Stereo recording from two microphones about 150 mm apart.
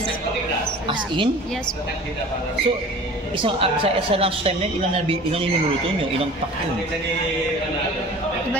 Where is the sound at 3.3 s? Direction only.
35° right (ahead or behind).